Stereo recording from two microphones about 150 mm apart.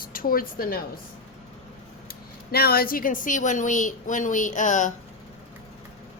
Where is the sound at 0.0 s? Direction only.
75° left (ahead or behind).